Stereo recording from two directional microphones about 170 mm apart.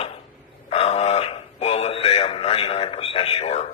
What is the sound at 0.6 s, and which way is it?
Speech, 40° left (ahead or behind).